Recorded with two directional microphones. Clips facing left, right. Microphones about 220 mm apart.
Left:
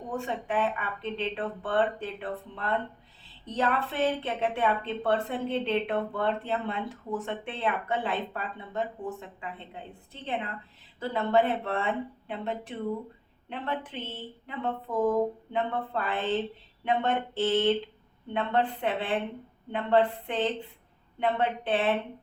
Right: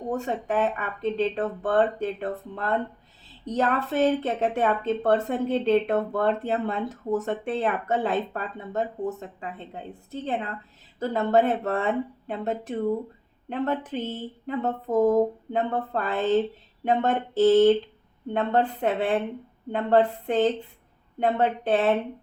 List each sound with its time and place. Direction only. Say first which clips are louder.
0.1 s speech: right 4 dB; 40° right (ahead or behind)